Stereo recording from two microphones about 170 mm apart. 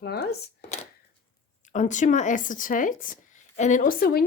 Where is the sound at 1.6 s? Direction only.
45° left (ahead or behind).